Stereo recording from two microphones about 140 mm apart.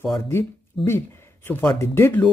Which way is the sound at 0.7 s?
Centre (ahead or behind).